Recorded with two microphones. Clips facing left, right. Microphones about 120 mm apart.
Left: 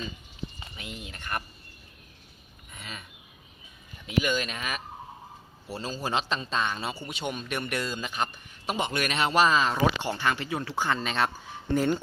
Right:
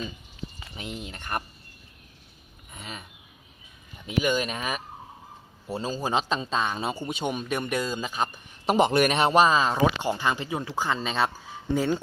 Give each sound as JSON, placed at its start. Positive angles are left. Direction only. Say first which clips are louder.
{"t": 0.9, "sound": "speech", "louder": "right 3 dB", "side_deg": -25}
{"t": 2.7, "sound": "speech", "louder": "right 2 dB", "side_deg": -20}
{"t": 4.2, "sound": "speech", "louder": "right 3 dB", "side_deg": -15}
{"t": 4.4, "sound": "speech", "louder": "right 4 dB", "side_deg": -30}
{"t": 5.6, "sound": "speech", "louder": "right 4 dB", "side_deg": -15}
{"t": 8.7, "sound": "a man's voice", "louder": "right 9 dB", "side_deg": -35}
{"t": 9.2, "sound": "speech", "louder": "left 1 dB", "side_deg": -20}